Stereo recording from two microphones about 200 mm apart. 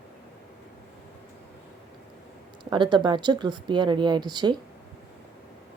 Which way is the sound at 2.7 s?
25° right (ahead or behind).